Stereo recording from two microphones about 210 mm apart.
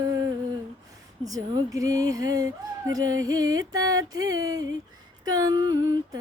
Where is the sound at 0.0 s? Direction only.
15° right (ahead or behind).